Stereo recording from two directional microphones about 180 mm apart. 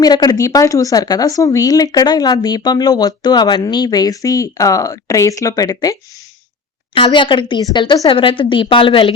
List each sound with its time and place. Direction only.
0.0 s speech: 20° left (ahead or behind)